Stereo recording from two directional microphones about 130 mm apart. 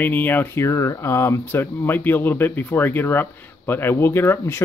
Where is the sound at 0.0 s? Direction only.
15° left (ahead or behind).